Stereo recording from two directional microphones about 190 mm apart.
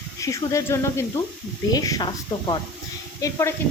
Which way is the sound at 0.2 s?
15° left (ahead or behind).